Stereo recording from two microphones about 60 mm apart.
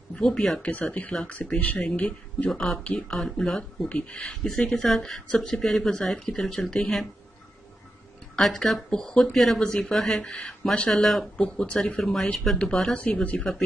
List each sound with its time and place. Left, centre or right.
0.1 s speech: centre
3.0 s speech: centre
3.9 s speech: centre
8.4 s speech: centre
12.9 s speech: left